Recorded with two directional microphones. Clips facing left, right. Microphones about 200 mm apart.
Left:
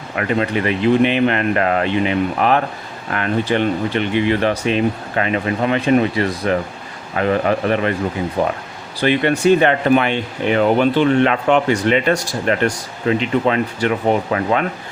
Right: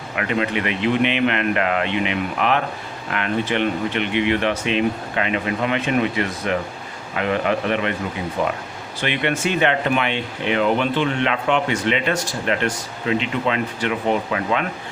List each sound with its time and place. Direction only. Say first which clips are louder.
0.2 s speech: left 4 dB; 40° left (ahead or behind)